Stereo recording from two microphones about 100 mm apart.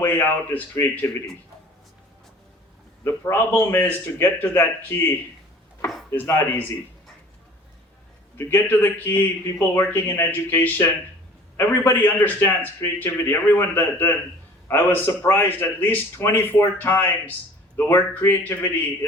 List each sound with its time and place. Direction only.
0.0 s a man's voice: 20° left (ahead or behind)
3.0 s a man's voice: 25° left (ahead or behind)
6.1 s a man's voice: 25° left (ahead or behind)
8.4 s a man's voice: 20° left (ahead or behind)